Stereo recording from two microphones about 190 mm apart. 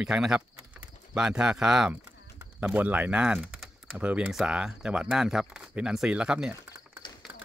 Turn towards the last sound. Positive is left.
turn(degrees=-5)  # may be behind; listen again after turning